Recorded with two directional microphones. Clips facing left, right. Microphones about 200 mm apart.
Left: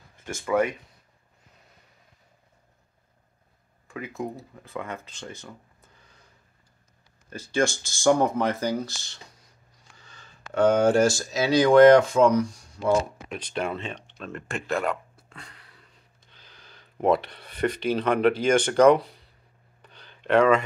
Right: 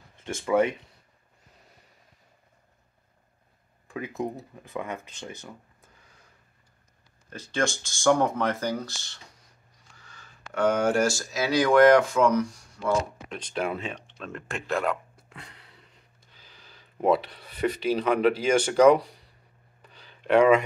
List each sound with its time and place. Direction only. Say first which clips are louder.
0.2 s speech: right 1 dB; 25° right (ahead or behind)
3.8 s speech: right 1 dB; 20° right (ahead or behind)
7.2 s speech: left 3 dB; 5° left (ahead or behind)
10.1 s speech: left 5 dB; 25° left (ahead or behind)
12.4 s speech: left 2 dB; 15° left (ahead or behind)
13.4 s speech: even; centre (ahead or behind)
15.2 s a sound: even; 20° right (ahead or behind)
16.3 s speech: left 1 dB; 5° right (ahead or behind)
19.9 s a sound: even; 5° right (ahead or behind)